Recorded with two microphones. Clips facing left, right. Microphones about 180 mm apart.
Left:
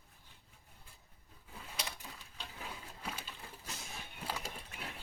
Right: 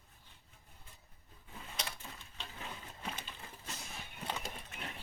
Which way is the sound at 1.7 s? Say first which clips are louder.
Even; 5° left (ahead or behind).